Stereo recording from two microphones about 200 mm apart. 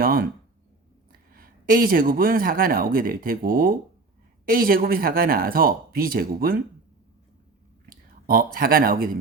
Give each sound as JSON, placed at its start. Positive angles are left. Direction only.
{"t": 0.0, "sound": "a sound", "side_deg": -45}
{"t": 1.3, "sound": "speech", "side_deg": -45}
{"t": 7.9, "sound": "speech", "side_deg": -45}